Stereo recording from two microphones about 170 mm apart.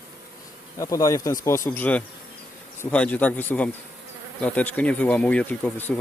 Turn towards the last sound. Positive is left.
turn(degrees=5)  # may be behind; listen again after turning